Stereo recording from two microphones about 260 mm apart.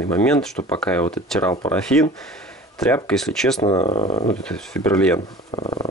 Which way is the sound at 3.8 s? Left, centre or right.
Left.